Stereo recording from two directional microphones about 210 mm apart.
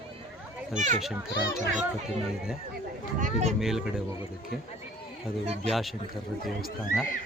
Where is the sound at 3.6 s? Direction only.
Centre (ahead or behind).